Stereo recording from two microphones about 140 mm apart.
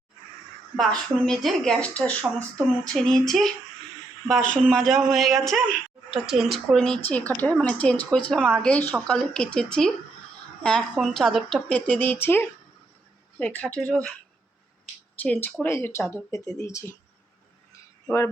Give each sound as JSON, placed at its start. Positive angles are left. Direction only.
{"t": 0.8, "sound": "speech", "side_deg": 5}
{"t": 15.2, "sound": "speech", "side_deg": 10}